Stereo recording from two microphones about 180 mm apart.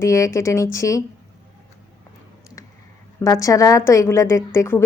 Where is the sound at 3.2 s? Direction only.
20° left (ahead or behind).